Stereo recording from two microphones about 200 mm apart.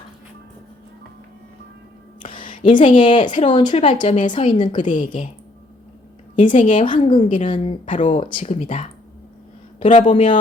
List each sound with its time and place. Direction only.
2.4 s a sound: 25° left (ahead or behind)
2.9 s speech: 25° left (ahead or behind)
4.9 s speech: 40° left (ahead or behind)
6.4 s speech: 40° left (ahead or behind)
6.8 s speech: 25° left (ahead or behind)